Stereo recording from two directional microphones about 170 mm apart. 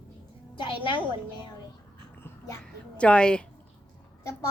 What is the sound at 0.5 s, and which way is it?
Music, 30° left (ahead or behind).